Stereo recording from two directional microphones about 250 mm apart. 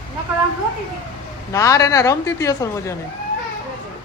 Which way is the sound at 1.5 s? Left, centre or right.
Centre.